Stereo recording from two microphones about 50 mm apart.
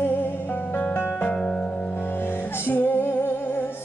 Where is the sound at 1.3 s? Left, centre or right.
Centre.